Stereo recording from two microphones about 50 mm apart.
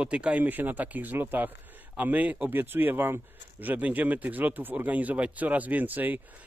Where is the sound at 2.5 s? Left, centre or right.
Right.